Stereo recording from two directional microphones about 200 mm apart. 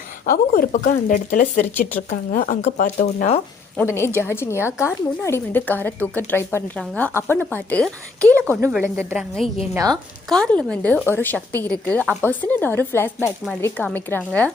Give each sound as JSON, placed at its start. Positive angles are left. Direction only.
{"t": 0.3, "sound": "speech", "side_deg": 45}
{"t": 3.8, "sound": "a woman's voice", "side_deg": 15}
{"t": 9.7, "sound": "a woman's voice", "side_deg": -20}
{"t": 10.2, "sound": "a woman's voice", "side_deg": 5}